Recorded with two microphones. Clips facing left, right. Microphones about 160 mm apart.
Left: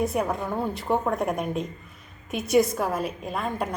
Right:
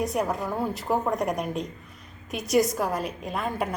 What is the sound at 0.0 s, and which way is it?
A woman's voice, centre (ahead or behind).